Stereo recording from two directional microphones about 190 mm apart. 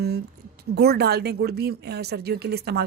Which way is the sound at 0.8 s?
60° right (ahead or behind).